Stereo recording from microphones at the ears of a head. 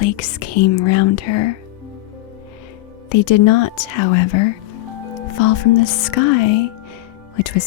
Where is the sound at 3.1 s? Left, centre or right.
Left.